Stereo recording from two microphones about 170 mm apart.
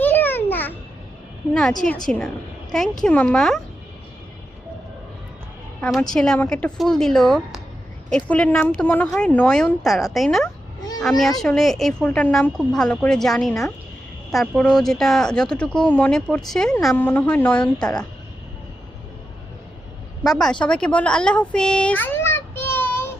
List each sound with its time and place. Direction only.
0.0 s a sound: 10° left (ahead or behind)
2.0 s speech: 5° left (ahead or behind)
6.0 s a woman's voice: 5° left (ahead or behind)
20.2 s speech: 5° left (ahead or behind)